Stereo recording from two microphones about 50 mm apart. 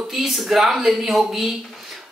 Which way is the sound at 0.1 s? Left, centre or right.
Centre.